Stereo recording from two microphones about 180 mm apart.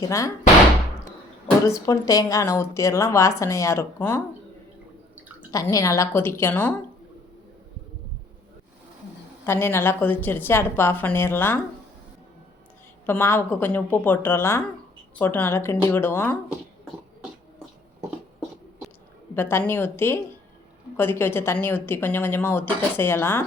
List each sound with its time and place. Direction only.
0.0 s a woman's voice: 20° left (ahead or behind)
1.9 s a woman's voice: 20° left (ahead or behind)
5.5 s a woman's voice: 20° left (ahead or behind)
9.5 s a woman's voice: 15° left (ahead or behind)
13.1 s a woman's voice: 10° left (ahead or behind)
19.3 s a woman's voice: 10° left (ahead or behind)